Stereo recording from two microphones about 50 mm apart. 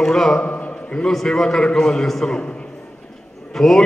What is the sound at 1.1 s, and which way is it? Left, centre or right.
A man's voice, centre.